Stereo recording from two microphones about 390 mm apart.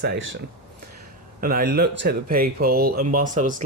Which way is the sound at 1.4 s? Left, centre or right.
Right.